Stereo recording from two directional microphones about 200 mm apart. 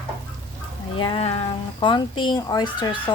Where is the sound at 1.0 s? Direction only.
25° left (ahead or behind).